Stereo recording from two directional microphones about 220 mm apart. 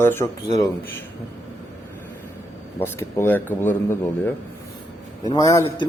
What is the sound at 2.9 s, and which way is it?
Speech, 10° left (ahead or behind).